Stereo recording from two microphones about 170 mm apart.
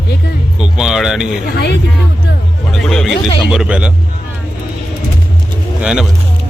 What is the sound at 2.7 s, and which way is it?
Speech, 5° left (ahead or behind).